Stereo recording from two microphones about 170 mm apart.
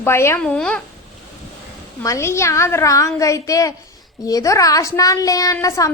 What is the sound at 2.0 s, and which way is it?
A woman's voice, 15° left (ahead or behind).